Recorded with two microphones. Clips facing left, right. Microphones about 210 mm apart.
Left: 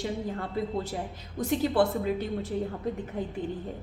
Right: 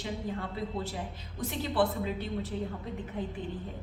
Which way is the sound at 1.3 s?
45° left (ahead or behind).